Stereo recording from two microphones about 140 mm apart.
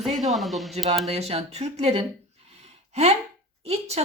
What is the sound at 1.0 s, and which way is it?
Speech, 50° right (ahead or behind).